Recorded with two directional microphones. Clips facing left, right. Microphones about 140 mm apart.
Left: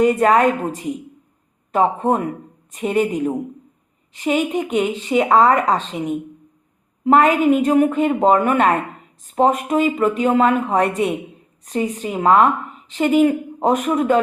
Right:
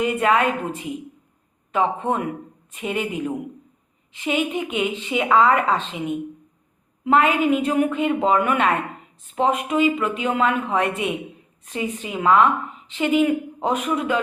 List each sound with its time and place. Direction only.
0.0 s speech: 40° left (ahead or behind)